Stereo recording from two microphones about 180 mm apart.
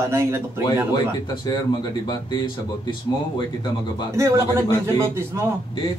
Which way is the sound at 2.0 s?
25° left (ahead or behind).